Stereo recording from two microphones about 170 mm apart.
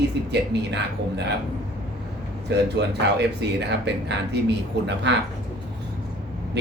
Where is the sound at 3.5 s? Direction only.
90° right.